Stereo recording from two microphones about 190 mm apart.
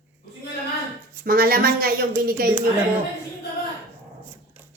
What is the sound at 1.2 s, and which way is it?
Speech, 50° right (ahead or behind).